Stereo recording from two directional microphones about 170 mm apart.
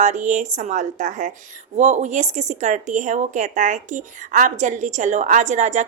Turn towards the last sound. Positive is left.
turn(degrees=-45)  # may be behind; listen again after turning